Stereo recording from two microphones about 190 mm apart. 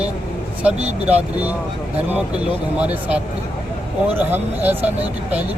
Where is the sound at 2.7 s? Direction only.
5° right (ahead or behind).